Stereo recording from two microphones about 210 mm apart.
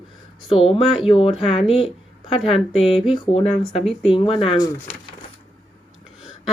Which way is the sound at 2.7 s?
25° left (ahead or behind).